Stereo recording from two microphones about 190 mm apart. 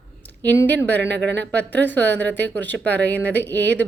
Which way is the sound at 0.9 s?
65° right (ahead or behind).